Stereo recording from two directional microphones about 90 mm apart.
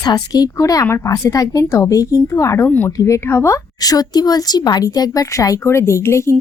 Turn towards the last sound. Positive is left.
turn(degrees=30)  # may be behind; listen again after turning